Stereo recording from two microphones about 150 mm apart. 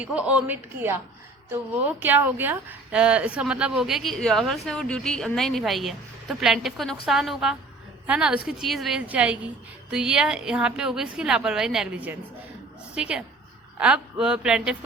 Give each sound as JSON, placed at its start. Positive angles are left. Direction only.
{"t": 0.0, "sound": "a woman's voice", "side_deg": -10}